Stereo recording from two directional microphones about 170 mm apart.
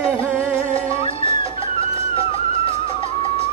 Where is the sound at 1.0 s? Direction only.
35° left (ahead or behind).